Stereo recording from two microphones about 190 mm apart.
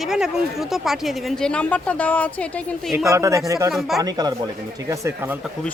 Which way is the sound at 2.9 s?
15° right (ahead or behind).